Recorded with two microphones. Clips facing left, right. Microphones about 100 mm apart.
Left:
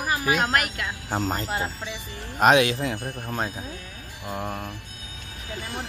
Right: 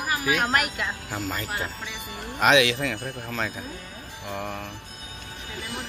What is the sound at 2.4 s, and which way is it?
Speech, 40° left (ahead or behind).